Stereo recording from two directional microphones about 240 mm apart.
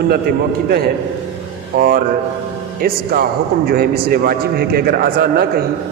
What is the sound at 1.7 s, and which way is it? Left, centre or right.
A man's voice, right.